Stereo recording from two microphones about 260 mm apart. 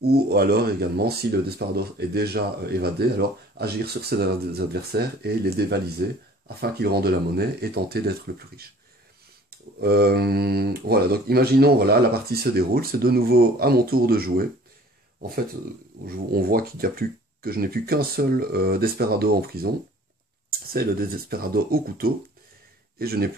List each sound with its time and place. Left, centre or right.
0.0 s speech: right
9.8 s speech: right
16.1 s speech: right